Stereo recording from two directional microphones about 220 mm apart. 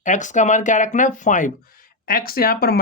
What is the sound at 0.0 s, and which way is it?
Speech, 35° left (ahead or behind).